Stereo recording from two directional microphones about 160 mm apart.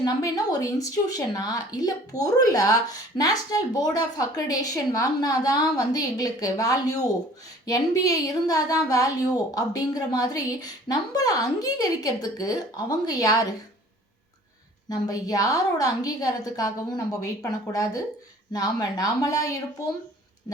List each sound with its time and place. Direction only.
0.0 s a woman's voice: 25° left (ahead or behind)
14.8 s a woman's voice: 25° left (ahead or behind)